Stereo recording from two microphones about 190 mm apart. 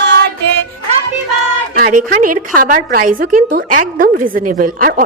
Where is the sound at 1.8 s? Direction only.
45° right (ahead or behind).